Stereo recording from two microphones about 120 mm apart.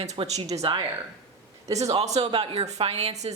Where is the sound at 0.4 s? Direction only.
65° right (ahead or behind).